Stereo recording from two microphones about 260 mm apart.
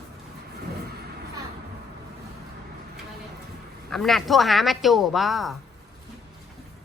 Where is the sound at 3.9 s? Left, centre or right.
Centre.